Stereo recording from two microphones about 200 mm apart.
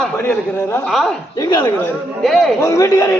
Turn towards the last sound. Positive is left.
turn(degrees=15)  # may be behind; listen again after turning